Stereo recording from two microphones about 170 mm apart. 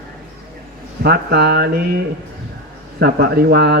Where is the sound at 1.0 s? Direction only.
65° right (ahead or behind).